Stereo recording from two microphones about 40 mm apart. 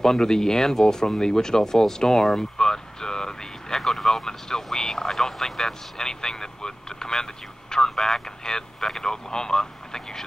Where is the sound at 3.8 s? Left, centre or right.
Centre.